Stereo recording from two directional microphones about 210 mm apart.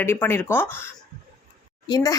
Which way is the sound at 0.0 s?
10° left (ahead or behind).